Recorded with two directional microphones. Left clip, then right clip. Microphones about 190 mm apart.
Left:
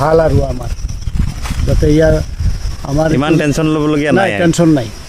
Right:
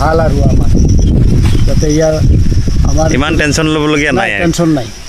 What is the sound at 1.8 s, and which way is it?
Speech, 15° left (ahead or behind).